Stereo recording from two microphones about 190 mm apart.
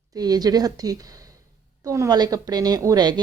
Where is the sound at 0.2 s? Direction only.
20° right (ahead or behind).